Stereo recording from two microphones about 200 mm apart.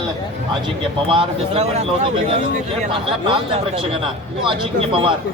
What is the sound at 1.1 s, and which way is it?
Speech, 30° right (ahead or behind).